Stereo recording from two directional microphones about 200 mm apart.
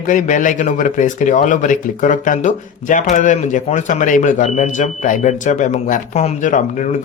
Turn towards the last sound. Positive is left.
turn(degrees=40)  # may be behind; listen again after turning